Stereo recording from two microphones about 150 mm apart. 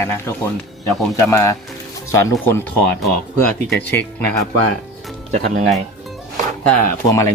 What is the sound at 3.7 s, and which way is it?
Speech, 15° left (ahead or behind).